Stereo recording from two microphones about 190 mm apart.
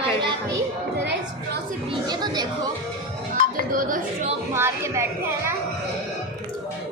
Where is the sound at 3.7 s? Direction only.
45° right (ahead or behind).